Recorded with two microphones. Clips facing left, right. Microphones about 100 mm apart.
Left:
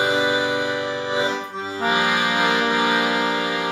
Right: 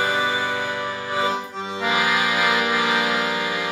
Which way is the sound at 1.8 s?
30° left (ahead or behind).